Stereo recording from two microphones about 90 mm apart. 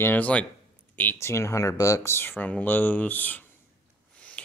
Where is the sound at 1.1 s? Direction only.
35° left (ahead or behind).